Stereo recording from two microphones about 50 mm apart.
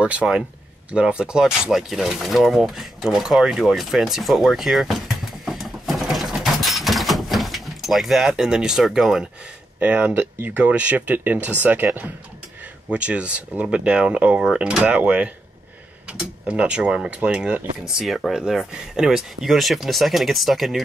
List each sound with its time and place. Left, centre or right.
0.0 s speech: right
2.2 s a sound: centre
9.8 s speech: right
12.9 s speech: right
16.4 s speech: right
18.0 s speech: centre